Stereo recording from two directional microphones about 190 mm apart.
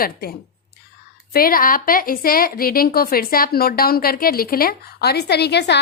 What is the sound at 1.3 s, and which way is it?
A woman's voice, 50° left (ahead or behind).